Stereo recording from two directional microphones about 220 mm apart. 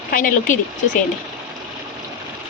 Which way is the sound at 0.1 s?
35° left (ahead or behind).